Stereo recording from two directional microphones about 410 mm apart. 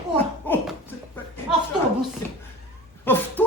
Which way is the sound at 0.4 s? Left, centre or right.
Centre.